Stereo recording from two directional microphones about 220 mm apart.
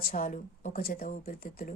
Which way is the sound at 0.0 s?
40° left (ahead or behind).